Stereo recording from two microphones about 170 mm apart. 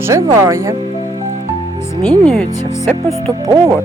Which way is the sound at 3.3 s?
20° right (ahead or behind).